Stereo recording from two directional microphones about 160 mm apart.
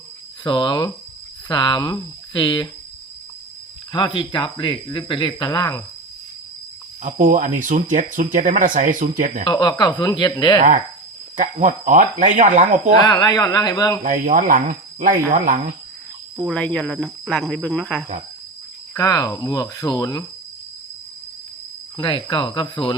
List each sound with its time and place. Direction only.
0.4 s speech: 30° left (ahead or behind)
3.9 s speech: 30° left (ahead or behind)
7.0 s speech: 60° right (ahead or behind)
9.4 s speech: 30° left (ahead or behind)
11.3 s speech: 55° right (ahead or behind)
13.0 s speech: 25° left (ahead or behind)
14.0 s speech: 55° right (ahead or behind)
16.4 s speech: 5° left (ahead or behind)
18.9 s speech: 20° left (ahead or behind)
21.9 s speech: 30° left (ahead or behind)